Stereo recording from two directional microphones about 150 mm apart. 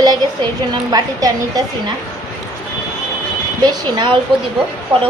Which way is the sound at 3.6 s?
30° right (ahead or behind).